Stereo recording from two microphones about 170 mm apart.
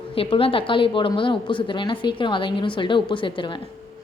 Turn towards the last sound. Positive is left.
turn(degrees=30)  # may be behind; listen again after turning